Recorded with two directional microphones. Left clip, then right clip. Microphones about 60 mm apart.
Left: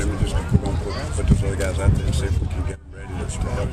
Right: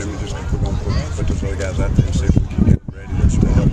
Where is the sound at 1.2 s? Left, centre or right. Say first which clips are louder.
Left 1 dB; centre.